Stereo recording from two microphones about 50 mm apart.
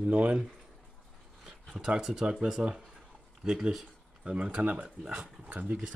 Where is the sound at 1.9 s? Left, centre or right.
Centre.